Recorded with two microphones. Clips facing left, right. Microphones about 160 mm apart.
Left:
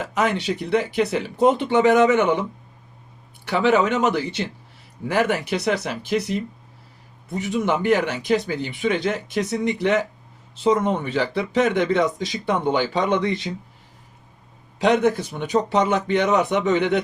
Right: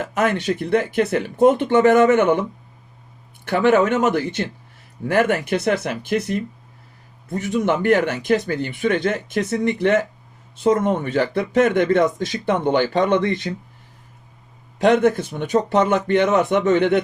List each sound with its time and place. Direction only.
0.0 s speech: 50° right (ahead or behind)
3.4 s speech: 55° right (ahead or behind)
14.8 s speech: 50° right (ahead or behind)